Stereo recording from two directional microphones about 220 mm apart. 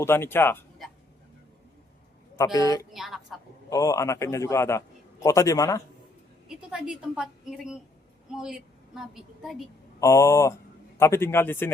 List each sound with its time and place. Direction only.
0.0 s speech: 10° left (ahead or behind)
2.3 s speech: 15° left (ahead or behind)
2.9 s a woman's voice: centre (ahead or behind)
3.7 s speech: 15° left (ahead or behind)
6.5 s a woman's voice: 5° right (ahead or behind)
10.0 s speech: 15° left (ahead or behind)